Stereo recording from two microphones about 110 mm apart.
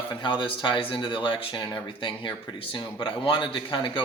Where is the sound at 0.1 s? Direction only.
45° left (ahead or behind).